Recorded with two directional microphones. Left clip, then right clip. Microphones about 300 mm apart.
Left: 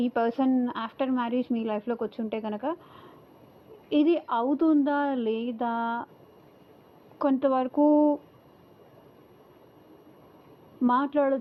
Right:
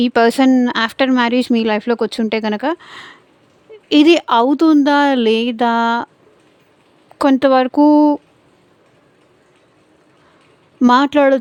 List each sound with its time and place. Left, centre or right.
0.0 s speech: right
7.2 s speech: right
10.8 s speech: right